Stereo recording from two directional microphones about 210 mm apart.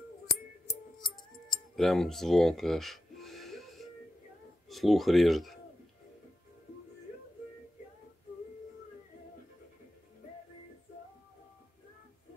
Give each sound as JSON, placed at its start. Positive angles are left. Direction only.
{"t": 0.7, "sound": "music", "side_deg": 20}
{"t": 1.8, "sound": "a sound", "side_deg": 0}
{"t": 4.6, "sound": "speech", "side_deg": 0}